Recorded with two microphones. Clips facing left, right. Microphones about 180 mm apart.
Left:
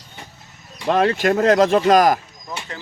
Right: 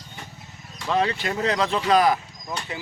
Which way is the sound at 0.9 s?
50° left (ahead or behind).